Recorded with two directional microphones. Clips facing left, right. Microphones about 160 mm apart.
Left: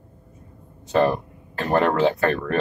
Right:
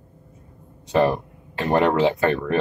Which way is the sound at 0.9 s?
15° right (ahead or behind).